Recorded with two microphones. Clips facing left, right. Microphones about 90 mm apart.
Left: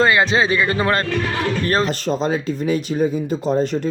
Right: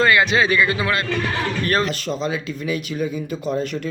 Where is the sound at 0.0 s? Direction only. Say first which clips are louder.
Left 1 dB; 30° left (ahead or behind).